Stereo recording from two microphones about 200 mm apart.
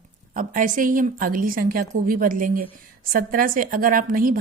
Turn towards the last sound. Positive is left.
turn(degrees=-45)  # may be behind; listen again after turning